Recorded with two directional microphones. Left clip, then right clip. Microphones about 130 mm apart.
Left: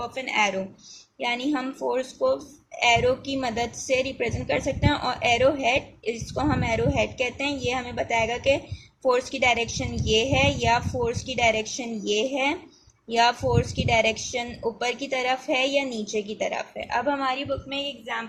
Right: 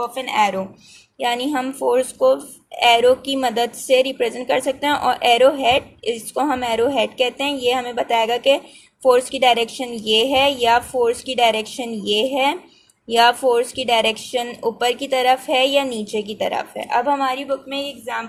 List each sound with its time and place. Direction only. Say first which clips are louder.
0.1 s a woman's voice: right 2 dB; 30° right (ahead or behind)